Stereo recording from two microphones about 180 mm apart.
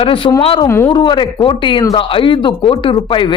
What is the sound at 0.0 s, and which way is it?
Speech, 30° left (ahead or behind).